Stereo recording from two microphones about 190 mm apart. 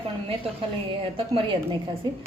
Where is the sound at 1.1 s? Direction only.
30° right (ahead or behind).